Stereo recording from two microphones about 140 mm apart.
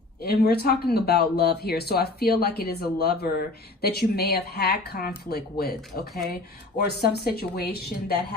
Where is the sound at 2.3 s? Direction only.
90° left.